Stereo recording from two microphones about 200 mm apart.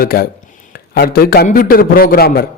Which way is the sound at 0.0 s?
50° left (ahead or behind).